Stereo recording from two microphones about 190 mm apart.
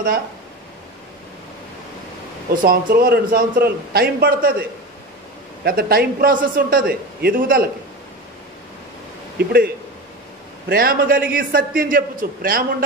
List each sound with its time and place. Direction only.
2.6 s a man's voice: 50° right (ahead or behind)
5.6 s a man's voice: 50° right (ahead or behind)
9.4 s speech: 55° right (ahead or behind)
10.7 s a man's voice: 50° right (ahead or behind)